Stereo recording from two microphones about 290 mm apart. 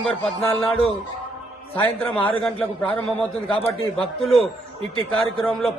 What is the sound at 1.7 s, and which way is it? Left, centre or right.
A man's voice, centre.